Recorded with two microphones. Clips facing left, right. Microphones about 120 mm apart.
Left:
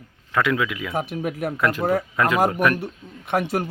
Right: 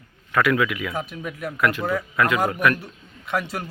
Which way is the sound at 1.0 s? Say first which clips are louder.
Left 5 dB; 55° left (ahead or behind).